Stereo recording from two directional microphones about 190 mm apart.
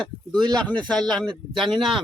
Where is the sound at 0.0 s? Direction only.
5° left (ahead or behind).